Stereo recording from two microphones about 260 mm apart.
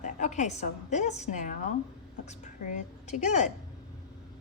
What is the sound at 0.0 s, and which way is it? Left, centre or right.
A woman's voice, left.